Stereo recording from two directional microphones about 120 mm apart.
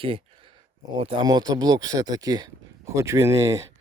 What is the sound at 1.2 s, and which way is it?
Speech, 35° right (ahead or behind).